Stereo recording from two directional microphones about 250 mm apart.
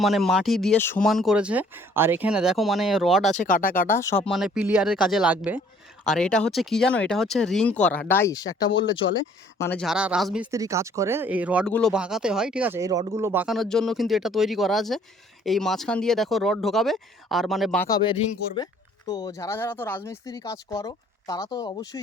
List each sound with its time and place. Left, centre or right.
0.0 s speech: centre
3.3 s speech: left
4.3 s speech: centre
9.6 s speech: centre
17.8 s speech: centre